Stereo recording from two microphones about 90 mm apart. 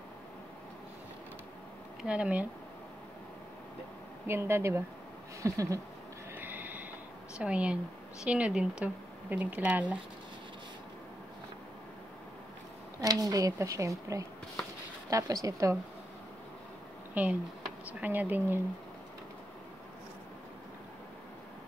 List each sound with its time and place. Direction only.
2.0 s speech: 15° right (ahead or behind)
4.3 s speech: 30° right (ahead or behind)
6.3 s a sound: 20° right (ahead or behind)
7.3 s speech: 15° right (ahead or behind)
13.0 s speech: 45° right (ahead or behind)
17.1 s speech: 15° right (ahead or behind)